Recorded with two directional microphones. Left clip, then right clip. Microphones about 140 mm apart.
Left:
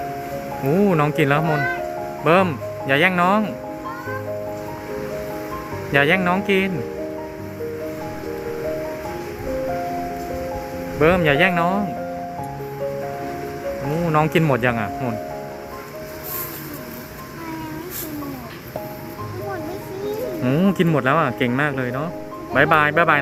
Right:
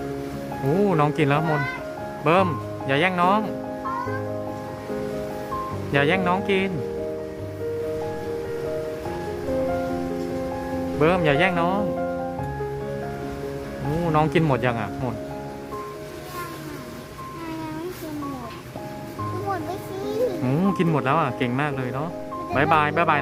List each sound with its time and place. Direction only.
0.9 s speech: 5° right (ahead or behind)
5.9 s speech: centre (ahead or behind)
11.0 s speech: 5° right (ahead or behind)
14.1 s speech: 5° right (ahead or behind)
20.4 s speech: 5° right (ahead or behind)